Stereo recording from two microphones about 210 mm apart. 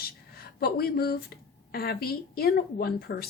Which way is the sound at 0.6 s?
45° left (ahead or behind).